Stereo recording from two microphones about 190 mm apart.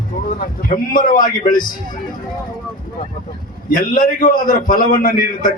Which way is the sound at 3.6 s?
45° left (ahead or behind).